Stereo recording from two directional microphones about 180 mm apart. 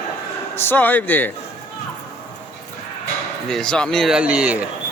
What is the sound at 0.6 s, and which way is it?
Speech, 10° left (ahead or behind).